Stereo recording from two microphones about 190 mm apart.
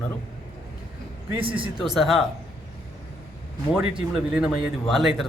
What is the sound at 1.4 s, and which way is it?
Speech, 25° right (ahead or behind).